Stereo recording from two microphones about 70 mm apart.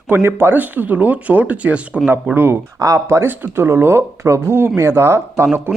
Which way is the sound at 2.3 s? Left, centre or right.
Right.